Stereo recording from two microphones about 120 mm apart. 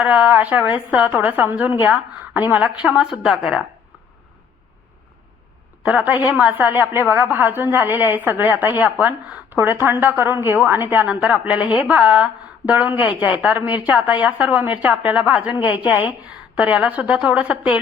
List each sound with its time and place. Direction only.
0.0 s a woman's voice: 10° right (ahead or behind)
5.8 s a woman's voice: 10° right (ahead or behind)
15.5 s a woman's voice: 40° left (ahead or behind)
15.8 s a woman's voice: 10° right (ahead or behind)